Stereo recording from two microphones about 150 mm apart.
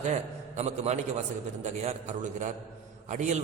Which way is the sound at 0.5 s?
50° right (ahead or behind).